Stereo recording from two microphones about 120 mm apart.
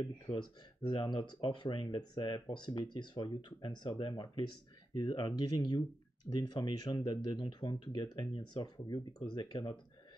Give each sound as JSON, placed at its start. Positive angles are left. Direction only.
{"t": 0.0, "sound": "speech", "side_deg": 40}